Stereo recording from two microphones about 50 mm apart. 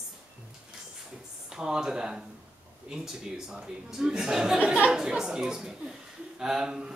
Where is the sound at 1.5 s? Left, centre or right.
Centre.